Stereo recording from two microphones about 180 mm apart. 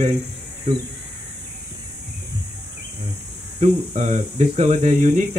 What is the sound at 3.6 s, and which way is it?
Speech, 40° right (ahead or behind).